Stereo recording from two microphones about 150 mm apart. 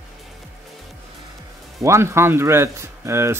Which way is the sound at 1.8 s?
20° right (ahead or behind).